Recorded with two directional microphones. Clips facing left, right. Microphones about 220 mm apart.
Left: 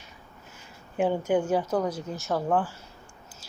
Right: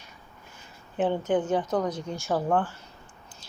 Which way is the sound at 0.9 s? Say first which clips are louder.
Left 1 dB; 10° left (ahead or behind).